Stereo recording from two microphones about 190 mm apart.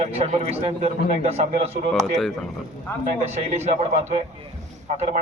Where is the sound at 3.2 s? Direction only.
35° right (ahead or behind).